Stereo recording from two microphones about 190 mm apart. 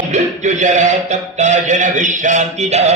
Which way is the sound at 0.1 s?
40° right (ahead or behind).